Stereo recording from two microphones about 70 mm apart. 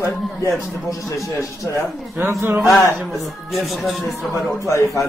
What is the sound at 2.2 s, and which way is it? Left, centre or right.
Speech, right.